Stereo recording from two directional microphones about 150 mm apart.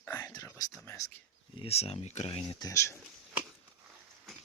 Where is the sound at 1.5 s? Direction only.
45° left (ahead or behind).